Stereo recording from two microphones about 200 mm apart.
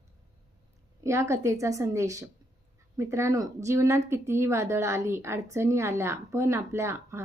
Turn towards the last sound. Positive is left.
turn(degrees=-15)  # may be behind; listen again after turning